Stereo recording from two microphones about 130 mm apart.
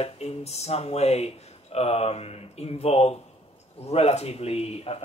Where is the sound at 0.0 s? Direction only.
55° left (ahead or behind).